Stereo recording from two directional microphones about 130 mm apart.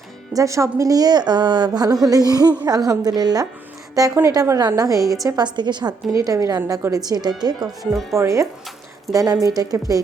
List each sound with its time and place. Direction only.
0.3 s a woman's voice: 25° right (ahead or behind)